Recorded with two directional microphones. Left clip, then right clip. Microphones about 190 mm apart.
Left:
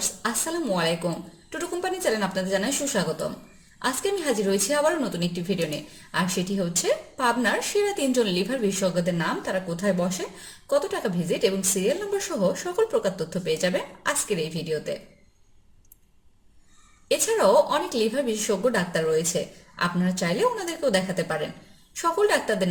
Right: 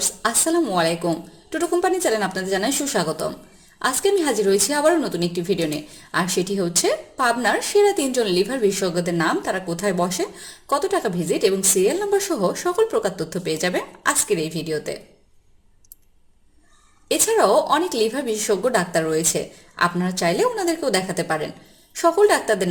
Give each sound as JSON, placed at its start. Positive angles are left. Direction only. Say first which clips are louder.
{"t": 0.2, "sound": "a woman's voice", "louder": "right 10 dB", "side_deg": -30}
{"t": 17.1, "sound": "a woman's voice", "louder": "right 3 dB", "side_deg": -30}